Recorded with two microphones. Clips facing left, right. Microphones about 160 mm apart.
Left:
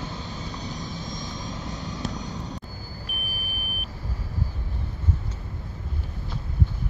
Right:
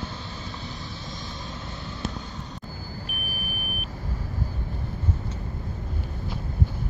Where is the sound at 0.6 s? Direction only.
45° left (ahead or behind).